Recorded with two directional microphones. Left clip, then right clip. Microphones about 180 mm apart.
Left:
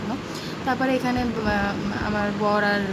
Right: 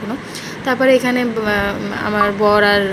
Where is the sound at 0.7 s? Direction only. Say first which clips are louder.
Right 10 dB; 20° right (ahead or behind).